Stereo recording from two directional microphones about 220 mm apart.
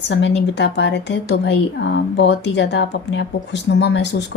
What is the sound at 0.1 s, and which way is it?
Speech, 55° left (ahead or behind).